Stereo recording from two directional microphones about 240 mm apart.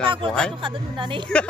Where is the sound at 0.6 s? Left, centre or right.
Centre.